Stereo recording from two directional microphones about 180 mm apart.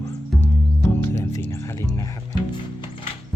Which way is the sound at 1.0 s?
15° left (ahead or behind).